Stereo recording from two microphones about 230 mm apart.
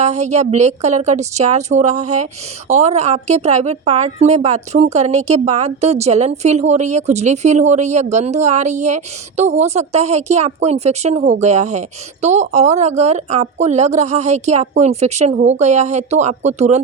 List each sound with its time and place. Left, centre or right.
0.0 s a woman's voice: right